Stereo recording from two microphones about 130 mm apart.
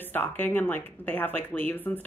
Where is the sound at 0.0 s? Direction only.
15° left (ahead or behind).